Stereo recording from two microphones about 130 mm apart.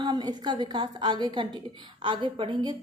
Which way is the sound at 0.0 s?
30° right (ahead or behind).